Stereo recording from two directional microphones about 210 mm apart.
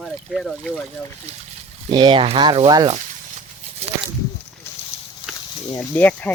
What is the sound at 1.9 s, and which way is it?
Speech, 20° right (ahead or behind).